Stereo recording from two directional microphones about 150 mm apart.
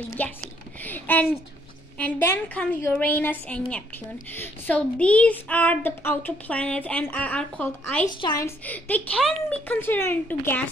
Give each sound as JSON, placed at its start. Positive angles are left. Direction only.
{"t": 0.2, "sound": "speech", "side_deg": 10}
{"t": 8.2, "sound": "a woman's voice", "side_deg": 30}
{"t": 8.5, "sound": "speech", "side_deg": 10}